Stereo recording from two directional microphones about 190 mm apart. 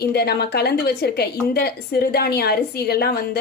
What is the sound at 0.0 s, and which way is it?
Speech, 55° left (ahead or behind).